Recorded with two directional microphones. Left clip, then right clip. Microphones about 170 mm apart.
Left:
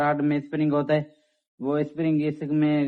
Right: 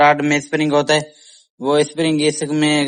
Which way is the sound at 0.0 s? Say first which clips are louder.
Right 11 dB; 25° right (ahead or behind).